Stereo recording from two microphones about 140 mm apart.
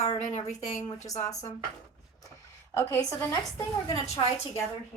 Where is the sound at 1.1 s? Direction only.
25° left (ahead or behind).